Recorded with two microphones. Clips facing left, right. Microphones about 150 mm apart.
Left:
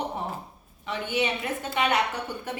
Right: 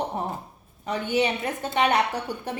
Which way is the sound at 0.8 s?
40° right (ahead or behind).